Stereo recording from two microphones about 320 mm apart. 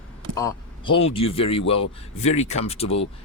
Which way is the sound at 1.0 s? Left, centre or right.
Centre.